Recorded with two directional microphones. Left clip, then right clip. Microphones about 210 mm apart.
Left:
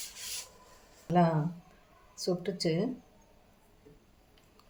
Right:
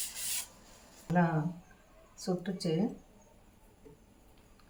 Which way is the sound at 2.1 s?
45° left (ahead or behind).